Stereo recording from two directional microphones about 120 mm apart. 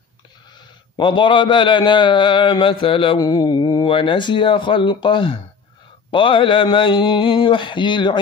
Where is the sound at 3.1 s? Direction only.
30° left (ahead or behind).